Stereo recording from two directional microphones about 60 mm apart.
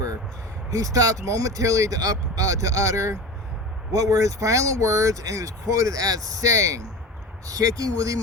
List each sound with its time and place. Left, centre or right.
0.7 s speech: right
7.4 s speech: right